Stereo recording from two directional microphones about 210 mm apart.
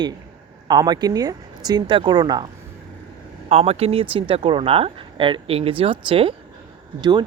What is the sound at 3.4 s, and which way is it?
Speech, 30° right (ahead or behind).